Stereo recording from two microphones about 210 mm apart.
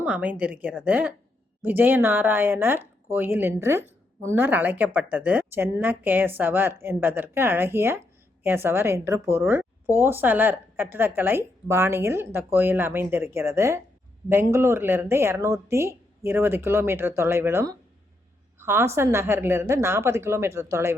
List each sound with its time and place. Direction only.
0.0 s a woman's voice: 5° right (ahead or behind)